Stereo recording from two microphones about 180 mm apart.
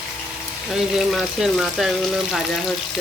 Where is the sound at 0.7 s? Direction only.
Centre (ahead or behind).